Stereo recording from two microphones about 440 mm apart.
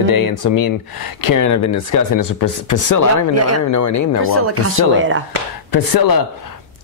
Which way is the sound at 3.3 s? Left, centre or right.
Right.